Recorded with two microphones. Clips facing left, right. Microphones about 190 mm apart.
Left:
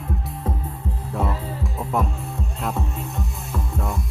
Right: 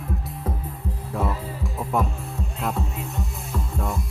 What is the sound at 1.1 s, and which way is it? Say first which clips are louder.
Music: left 1 dB; centre (ahead or behind).